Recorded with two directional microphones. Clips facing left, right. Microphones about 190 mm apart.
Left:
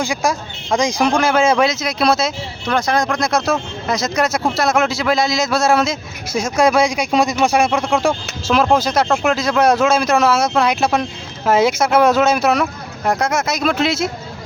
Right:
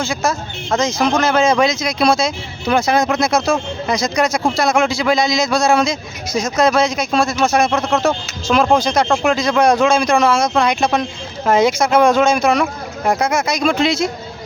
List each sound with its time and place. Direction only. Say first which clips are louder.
0.0 s speech: even; 15° left (ahead or behind)
2.6 s speech: right 3 dB; 10° right (ahead or behind)